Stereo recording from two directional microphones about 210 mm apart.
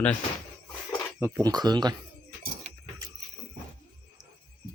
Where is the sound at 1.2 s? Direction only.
15° right (ahead or behind).